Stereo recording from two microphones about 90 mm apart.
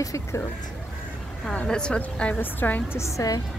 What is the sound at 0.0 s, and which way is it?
Speech, 40° left (ahead or behind).